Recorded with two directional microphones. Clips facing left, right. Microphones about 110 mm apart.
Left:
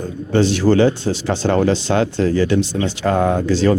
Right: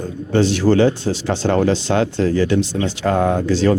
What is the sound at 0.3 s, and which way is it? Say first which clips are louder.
Speech: even; 15° left (ahead or behind).